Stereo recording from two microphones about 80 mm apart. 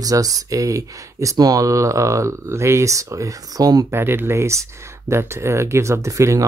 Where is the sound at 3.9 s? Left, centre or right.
Right.